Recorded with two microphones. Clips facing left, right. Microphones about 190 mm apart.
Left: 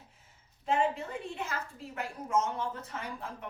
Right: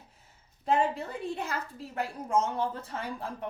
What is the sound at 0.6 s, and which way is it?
A woman's voice, 35° right (ahead or behind).